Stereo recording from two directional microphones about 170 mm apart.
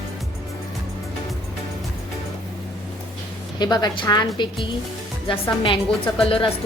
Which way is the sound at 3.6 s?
25° left (ahead or behind).